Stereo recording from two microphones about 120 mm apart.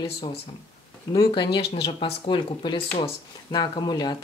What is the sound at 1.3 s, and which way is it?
A woman's voice, 45° left (ahead or behind).